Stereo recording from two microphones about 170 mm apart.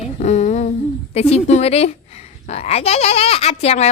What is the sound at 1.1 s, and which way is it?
Speech, 40° left (ahead or behind).